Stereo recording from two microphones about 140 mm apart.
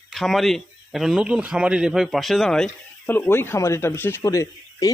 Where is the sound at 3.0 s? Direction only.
15° left (ahead or behind).